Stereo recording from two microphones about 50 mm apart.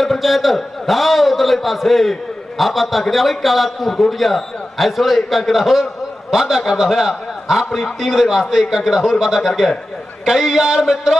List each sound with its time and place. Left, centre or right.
0.0 s a man's voice: centre